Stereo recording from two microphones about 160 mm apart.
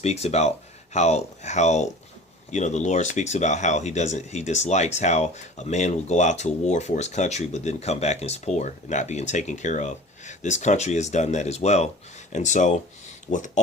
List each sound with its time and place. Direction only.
0.0 s speech: 40° left (ahead or behind)